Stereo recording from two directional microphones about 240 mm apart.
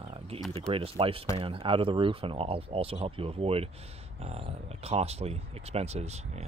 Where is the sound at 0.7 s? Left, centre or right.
Right.